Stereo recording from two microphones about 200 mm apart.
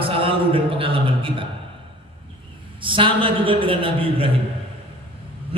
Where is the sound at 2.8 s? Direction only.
25° right (ahead or behind).